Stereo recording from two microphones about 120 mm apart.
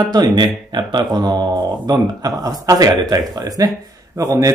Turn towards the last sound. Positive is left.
turn(degrees=-25)  # may be behind; listen again after turning